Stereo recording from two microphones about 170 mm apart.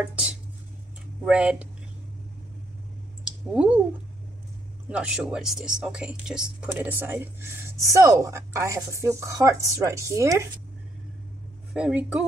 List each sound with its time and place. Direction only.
0.0 s dishes: 5° right (ahead or behind)
1.2 s speech: 5° right (ahead or behind)
3.5 s speech: 10° right (ahead or behind)
4.8 s speech: 5° right (ahead or behind)
11.7 s speech: 5° right (ahead or behind)